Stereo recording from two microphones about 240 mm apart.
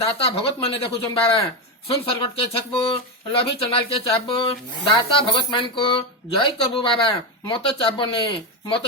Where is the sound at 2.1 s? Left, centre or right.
Left.